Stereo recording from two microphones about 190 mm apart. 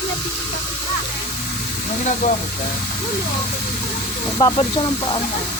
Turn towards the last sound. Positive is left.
turn(degrees=25)  # may be behind; listen again after turning